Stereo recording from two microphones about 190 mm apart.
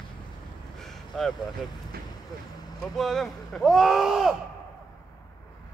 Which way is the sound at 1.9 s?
55° right (ahead or behind).